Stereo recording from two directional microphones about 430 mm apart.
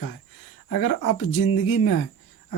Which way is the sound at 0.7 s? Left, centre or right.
Left.